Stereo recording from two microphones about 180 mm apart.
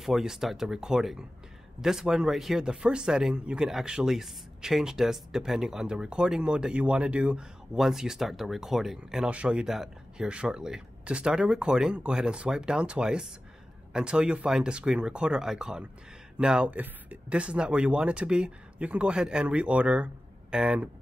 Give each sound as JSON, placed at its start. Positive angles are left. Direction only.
{"t": 0.0, "sound": "speech", "side_deg": 0}